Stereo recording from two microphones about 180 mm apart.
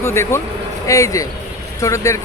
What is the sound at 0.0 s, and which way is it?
Speech, 15° left (ahead or behind).